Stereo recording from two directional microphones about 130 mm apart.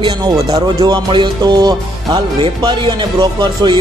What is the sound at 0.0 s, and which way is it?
Speech, 30° right (ahead or behind).